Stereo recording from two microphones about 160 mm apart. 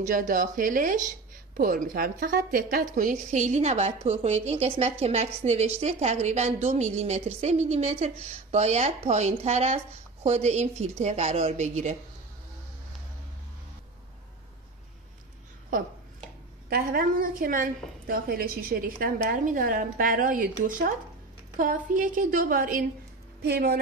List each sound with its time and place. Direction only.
0.0 s a woman's voice: 55° right (ahead or behind)
16.6 s a woman's voice: 70° right (ahead or behind)
23.4 s speech: 85° right